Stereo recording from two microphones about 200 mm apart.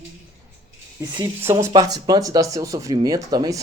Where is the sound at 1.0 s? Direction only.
15° right (ahead or behind).